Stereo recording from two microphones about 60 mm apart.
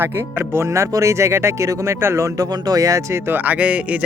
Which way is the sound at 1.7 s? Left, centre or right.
Right.